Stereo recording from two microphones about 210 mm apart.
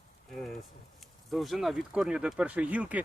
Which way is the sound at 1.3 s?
Centre (ahead or behind).